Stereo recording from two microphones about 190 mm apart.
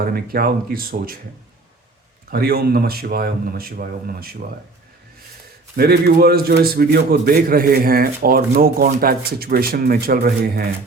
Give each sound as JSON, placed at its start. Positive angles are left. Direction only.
{"t": 0.0, "sound": "a man's voice", "side_deg": -50}
{"t": 2.3, "sound": "a man's voice", "side_deg": -55}
{"t": 5.7, "sound": "a man's voice", "side_deg": -55}